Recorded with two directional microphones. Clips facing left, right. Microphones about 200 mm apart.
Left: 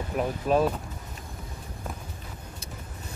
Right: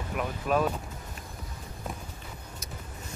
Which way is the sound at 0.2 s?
30° left (ahead or behind).